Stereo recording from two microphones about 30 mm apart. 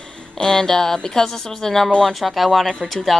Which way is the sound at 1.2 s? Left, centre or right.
Centre.